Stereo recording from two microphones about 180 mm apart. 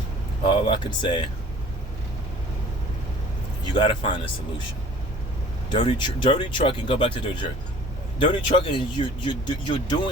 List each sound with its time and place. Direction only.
0.4 s speech: 25° left (ahead or behind)
3.8 s speech: 30° left (ahead or behind)
5.7 s speech: 30° left (ahead or behind)